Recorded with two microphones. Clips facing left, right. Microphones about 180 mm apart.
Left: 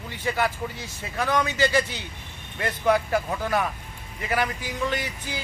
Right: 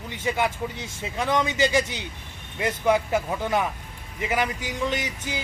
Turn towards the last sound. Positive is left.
turn(degrees=-20)  # may be behind; listen again after turning